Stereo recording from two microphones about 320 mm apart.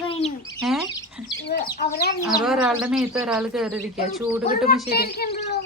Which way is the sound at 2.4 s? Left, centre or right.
Centre.